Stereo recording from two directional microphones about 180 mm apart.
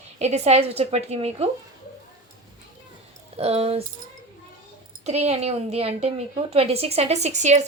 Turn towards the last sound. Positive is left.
turn(degrees=-40)  # may be behind; listen again after turning